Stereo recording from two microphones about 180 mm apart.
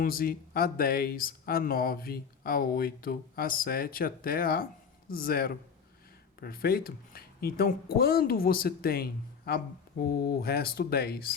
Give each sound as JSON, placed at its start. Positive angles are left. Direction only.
{"t": 0.0, "sound": "speech", "side_deg": 55}